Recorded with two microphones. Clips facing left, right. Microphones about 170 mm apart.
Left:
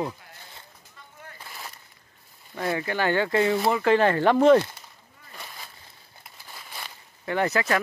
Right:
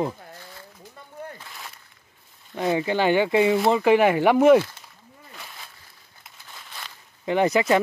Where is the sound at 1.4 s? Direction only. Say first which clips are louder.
Even; 5° left (ahead or behind).